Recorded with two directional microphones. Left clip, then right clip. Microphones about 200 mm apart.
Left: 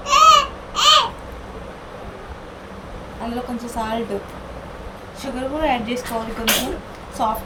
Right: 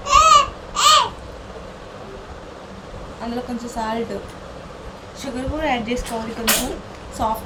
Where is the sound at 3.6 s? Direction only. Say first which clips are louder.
Even; centre (ahead or behind).